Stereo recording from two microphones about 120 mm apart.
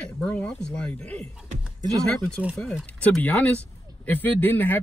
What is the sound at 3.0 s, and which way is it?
Speech, 15° left (ahead or behind).